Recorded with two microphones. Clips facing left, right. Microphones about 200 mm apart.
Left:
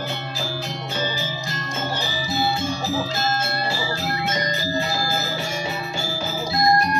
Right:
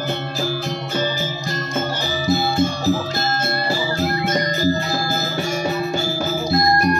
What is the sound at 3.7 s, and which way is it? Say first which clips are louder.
Music: right 5 dB; 45° right (ahead or behind).